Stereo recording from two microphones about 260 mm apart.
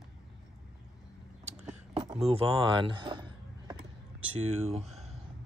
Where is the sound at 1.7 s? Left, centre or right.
Centre.